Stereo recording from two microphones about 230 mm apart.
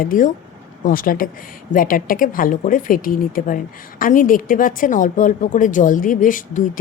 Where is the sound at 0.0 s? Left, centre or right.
Left.